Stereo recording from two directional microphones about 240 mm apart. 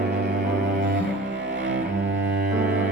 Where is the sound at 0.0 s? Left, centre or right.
Right.